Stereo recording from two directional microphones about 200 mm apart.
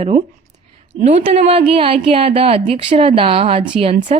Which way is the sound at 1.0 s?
40° right (ahead or behind).